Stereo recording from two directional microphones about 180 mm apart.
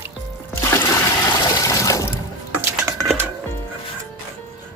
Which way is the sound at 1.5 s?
20° left (ahead or behind).